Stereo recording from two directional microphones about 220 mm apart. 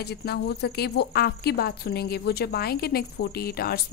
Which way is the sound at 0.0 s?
45° left (ahead or behind).